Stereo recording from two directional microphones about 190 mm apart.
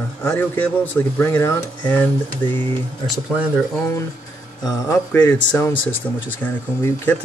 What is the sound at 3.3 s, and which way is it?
Speech, 5° right (ahead or behind).